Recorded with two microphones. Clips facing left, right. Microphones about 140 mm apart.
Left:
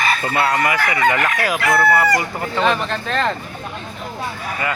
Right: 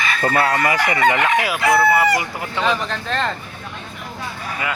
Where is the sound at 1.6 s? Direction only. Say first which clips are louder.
Even; 10° right (ahead or behind).